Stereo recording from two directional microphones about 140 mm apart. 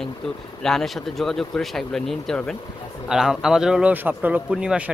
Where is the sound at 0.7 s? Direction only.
Centre (ahead or behind).